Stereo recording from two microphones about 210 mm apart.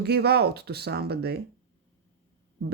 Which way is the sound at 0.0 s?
50° right (ahead or behind).